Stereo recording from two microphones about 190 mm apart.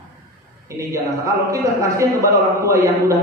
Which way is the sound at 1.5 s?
15° right (ahead or behind).